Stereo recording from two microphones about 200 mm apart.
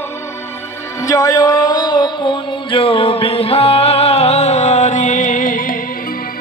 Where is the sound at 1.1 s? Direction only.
15° left (ahead or behind); by 5.7 s 45° left (ahead or behind).